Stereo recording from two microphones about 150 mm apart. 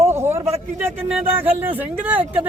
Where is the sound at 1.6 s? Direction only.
10° right (ahead or behind).